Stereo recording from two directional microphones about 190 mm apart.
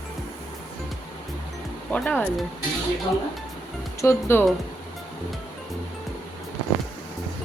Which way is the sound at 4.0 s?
15° left (ahead or behind).